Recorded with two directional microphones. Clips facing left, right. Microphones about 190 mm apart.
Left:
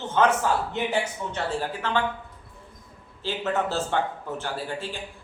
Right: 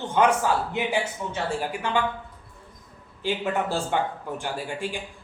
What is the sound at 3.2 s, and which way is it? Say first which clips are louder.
A man's voice: right 1 dB; 15° right (ahead or behind).